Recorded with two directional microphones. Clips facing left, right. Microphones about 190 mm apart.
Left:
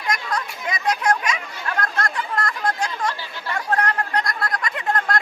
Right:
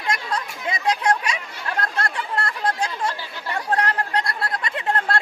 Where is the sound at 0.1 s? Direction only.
30° right (ahead or behind).